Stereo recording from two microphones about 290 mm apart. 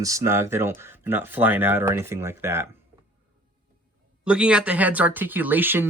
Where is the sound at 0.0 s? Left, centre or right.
Centre.